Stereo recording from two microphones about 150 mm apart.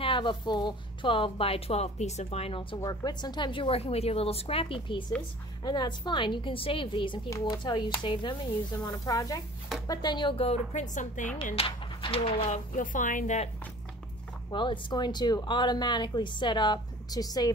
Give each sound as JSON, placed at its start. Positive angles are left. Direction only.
{"t": 0.0, "sound": "a woman's voice", "side_deg": 35}
{"t": 2.8, "sound": "a woman's voice", "side_deg": 25}
{"t": 11.5, "sound": "speech", "side_deg": 35}
{"t": 14.5, "sound": "a woman's voice", "side_deg": 35}